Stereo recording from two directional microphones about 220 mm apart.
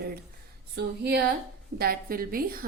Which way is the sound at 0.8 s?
50° right (ahead or behind).